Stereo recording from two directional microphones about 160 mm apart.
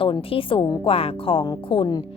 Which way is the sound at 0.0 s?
35° left (ahead or behind).